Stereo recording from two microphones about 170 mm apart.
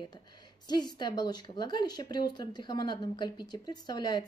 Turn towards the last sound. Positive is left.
turn(degrees=25)  # may be behind; listen again after turning